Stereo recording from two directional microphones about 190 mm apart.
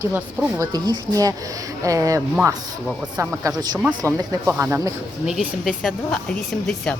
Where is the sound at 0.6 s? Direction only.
20° right (ahead or behind).